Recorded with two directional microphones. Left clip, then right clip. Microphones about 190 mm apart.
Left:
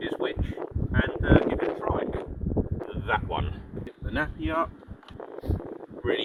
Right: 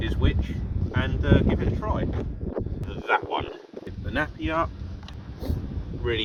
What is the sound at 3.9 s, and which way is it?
Speech, centre (ahead or behind).